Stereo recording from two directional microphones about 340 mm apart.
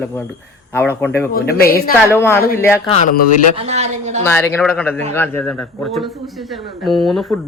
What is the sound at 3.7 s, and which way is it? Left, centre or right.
Speech, centre.